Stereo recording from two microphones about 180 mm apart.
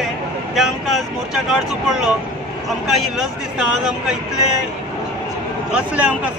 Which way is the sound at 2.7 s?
Centre (ahead or behind).